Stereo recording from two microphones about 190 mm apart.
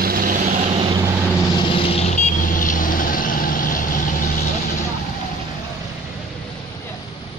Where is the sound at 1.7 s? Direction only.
30° left (ahead or behind); by 4.0 s 45° left (ahead or behind).